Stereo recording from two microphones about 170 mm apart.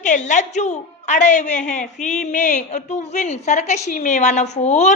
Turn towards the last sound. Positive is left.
turn(degrees=45)  # may be behind; listen again after turning